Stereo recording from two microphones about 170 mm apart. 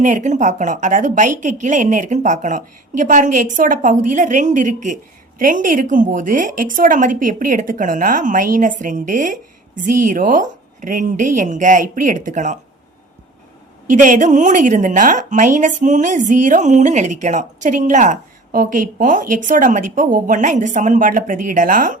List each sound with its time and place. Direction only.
0.0 s a woman's voice: 45° right (ahead or behind)
13.9 s a woman's voice: 50° right (ahead or behind)